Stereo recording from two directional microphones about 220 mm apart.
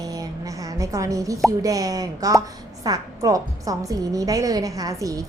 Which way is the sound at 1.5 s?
15° right (ahead or behind).